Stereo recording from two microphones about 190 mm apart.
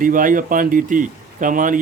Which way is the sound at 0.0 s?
45° right (ahead or behind).